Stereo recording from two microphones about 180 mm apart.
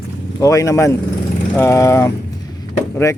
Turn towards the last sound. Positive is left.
turn(degrees=15)  # may be behind; listen again after turning